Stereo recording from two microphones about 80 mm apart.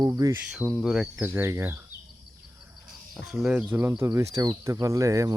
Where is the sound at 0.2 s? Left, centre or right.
Right.